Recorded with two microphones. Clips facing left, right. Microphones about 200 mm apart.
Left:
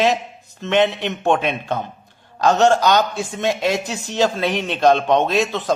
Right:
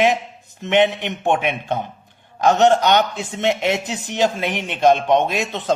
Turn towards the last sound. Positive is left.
turn(degrees=-20)  # may be behind; listen again after turning